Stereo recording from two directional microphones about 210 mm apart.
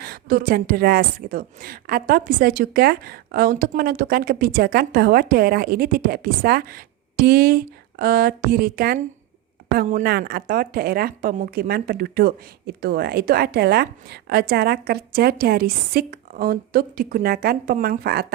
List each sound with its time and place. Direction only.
0.0 s a woman's voice: 45° right (ahead or behind)